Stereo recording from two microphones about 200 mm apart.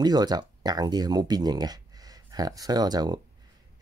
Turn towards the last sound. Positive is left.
turn(degrees=-20)  # may be behind; listen again after turning